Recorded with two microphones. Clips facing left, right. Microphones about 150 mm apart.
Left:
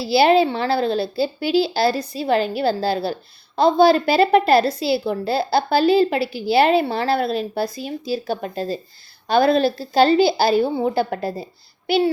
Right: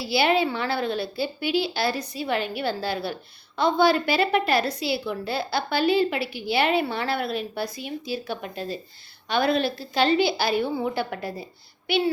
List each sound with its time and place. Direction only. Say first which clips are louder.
0.0 s a woman's voice: left 7 dB; 35° left (ahead or behind)
11.9 s child singing: left 5 dB; 35° left (ahead or behind)